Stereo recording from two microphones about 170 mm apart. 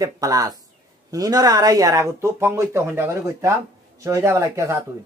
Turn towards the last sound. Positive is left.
turn(degrees=-15)  # may be behind; listen again after turning